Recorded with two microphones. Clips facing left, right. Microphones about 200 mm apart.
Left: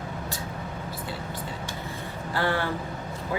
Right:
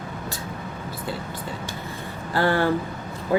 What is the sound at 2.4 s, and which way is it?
Speech, 40° right (ahead or behind).